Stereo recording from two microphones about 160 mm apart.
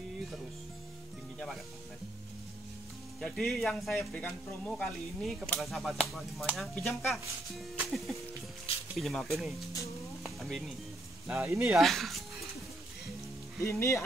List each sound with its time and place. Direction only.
3.2 s speech: centre (ahead or behind)
10.2 s sizzle: centre (ahead or behind)
11.3 s speech: 15° right (ahead or behind)
11.6 s speech: centre (ahead or behind)
13.6 s speech: 20° left (ahead or behind)